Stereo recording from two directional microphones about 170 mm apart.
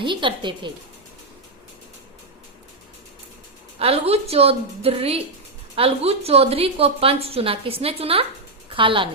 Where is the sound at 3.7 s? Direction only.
35° right (ahead or behind).